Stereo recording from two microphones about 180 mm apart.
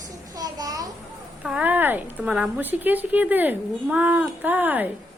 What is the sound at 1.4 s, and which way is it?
A woman's voice, 5° right (ahead or behind).